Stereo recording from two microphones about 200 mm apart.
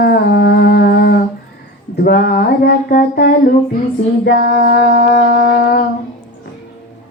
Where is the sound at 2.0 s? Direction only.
50° left (ahead or behind).